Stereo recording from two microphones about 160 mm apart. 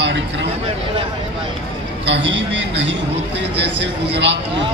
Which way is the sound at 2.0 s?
90° right.